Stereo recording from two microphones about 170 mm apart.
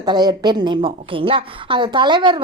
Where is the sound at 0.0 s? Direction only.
25° right (ahead or behind).